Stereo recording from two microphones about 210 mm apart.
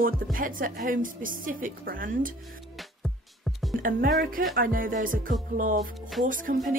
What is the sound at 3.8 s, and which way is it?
Speech, 40° right (ahead or behind).